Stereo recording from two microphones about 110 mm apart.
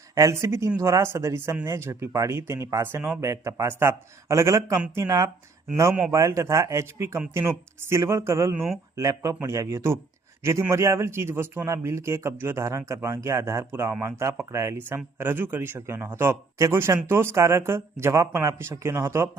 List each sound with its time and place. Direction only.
0.1 s speech: 30° right (ahead or behind)
8.5 s speech: 5° right (ahead or behind)
9.0 s speech: 30° right (ahead or behind)